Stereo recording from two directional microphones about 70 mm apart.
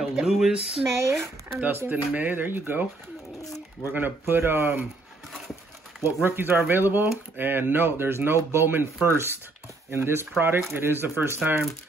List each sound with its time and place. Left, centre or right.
0.0 s speech: centre
0.9 s speech: right
1.6 s speech: right
6.2 s speech: right